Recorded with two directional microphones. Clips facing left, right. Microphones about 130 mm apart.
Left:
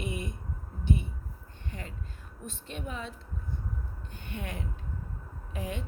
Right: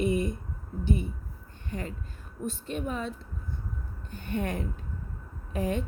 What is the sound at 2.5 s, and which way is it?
Speech, 45° right (ahead or behind).